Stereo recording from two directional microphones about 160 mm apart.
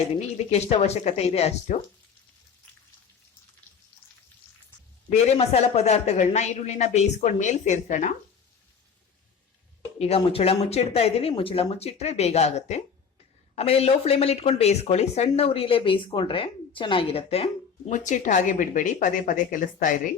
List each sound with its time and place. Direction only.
0.5 s speech: 40° left (ahead or behind)
5.1 s speech: 40° left (ahead or behind)
10.0 s speech: 40° left (ahead or behind); by 20.0 s 55° left (ahead or behind)